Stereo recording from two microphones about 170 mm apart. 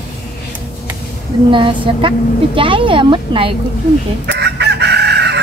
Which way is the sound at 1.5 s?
30° right (ahead or behind).